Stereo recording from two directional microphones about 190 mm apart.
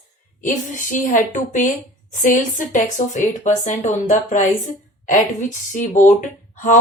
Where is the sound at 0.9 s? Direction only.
40° left (ahead or behind).